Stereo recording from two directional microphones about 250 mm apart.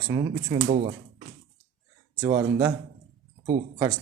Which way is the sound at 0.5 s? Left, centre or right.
Right.